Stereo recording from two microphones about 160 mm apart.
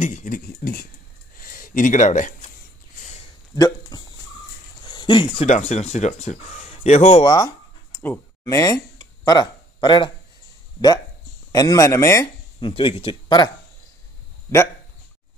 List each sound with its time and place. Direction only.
0.0 s speech: 50° left (ahead or behind)
1.3 s a sound: 60° left (ahead or behind); by 3.3 s 45° left (ahead or behind)
3.5 s speech: 20° left (ahead or behind)
4.8 s a sound: 30° left (ahead or behind)
5.5 s speech: 45° left (ahead or behind)
7.2 s a sound: 25° left (ahead or behind)
8.0 s speech: 15° left (ahead or behind)
11.5 s speech: 20° left (ahead or behind)
12.5 s speech: 30° left (ahead or behind)